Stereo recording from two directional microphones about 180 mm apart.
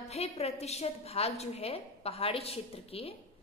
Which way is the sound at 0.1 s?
35° left (ahead or behind).